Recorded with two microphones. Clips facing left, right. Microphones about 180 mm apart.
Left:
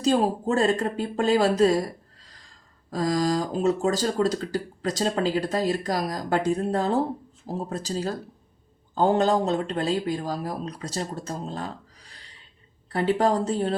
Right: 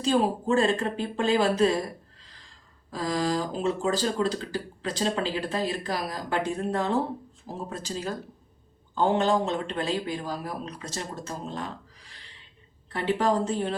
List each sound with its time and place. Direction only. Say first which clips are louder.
0.0 s speech: left 2 dB; 40° left (ahead or behind)
2.9 s speech: left 3 dB; 40° left (ahead or behind)